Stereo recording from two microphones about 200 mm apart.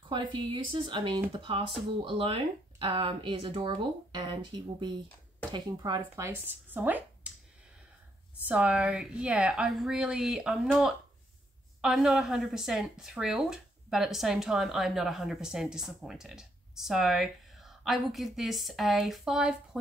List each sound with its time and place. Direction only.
0.1 s speech: 25° right (ahead or behind)
8.5 s speech: 5° right (ahead or behind)